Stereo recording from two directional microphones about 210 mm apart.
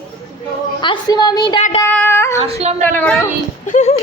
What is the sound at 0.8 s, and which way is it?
Speech, 20° left (ahead or behind).